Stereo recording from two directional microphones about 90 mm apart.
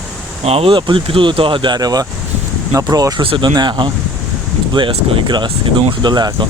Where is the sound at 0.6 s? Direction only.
65° right (ahead or behind); by 3.2 s 45° right (ahead or behind).